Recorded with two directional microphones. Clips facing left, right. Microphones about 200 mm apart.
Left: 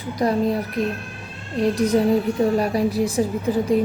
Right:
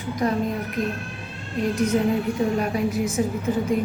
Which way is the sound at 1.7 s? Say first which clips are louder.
Left 3 dB; 35° left (ahead or behind).